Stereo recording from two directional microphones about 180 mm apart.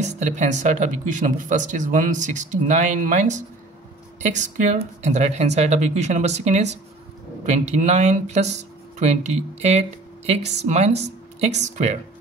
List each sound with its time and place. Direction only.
0.0 s speech: 40° right (ahead or behind)